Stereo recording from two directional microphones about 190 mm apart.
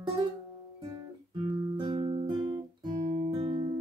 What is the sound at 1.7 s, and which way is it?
Music, 25° right (ahead or behind).